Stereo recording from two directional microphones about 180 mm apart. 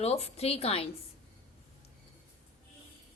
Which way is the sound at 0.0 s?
35° left (ahead or behind).